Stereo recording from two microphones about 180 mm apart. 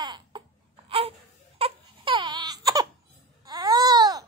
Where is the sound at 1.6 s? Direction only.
30° right (ahead or behind).